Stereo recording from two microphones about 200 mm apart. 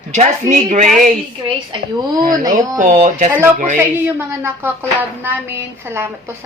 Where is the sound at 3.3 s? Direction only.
10° right (ahead or behind).